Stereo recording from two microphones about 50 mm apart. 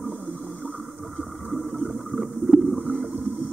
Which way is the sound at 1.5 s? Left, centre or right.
Centre.